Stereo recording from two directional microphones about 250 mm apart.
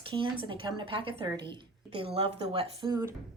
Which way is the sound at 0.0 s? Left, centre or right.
Centre.